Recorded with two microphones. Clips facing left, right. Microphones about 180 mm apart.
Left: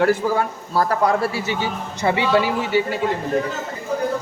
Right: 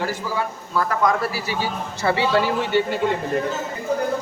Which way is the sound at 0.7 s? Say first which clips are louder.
Left 2 dB; 35° left (ahead or behind).